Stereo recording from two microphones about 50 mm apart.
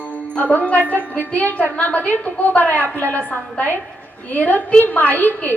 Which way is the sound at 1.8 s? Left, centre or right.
Left.